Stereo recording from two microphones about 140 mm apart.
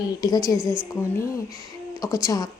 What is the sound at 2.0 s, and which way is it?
Speech, 25° left (ahead or behind).